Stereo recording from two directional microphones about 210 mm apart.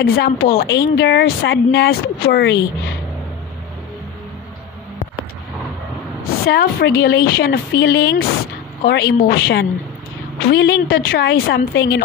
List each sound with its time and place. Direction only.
0.0 s speech: 50° left (ahead or behind)
6.4 s speech: 50° left (ahead or behind)